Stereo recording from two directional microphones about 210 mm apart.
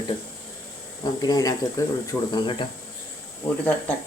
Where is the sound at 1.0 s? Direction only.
20° left (ahead or behind).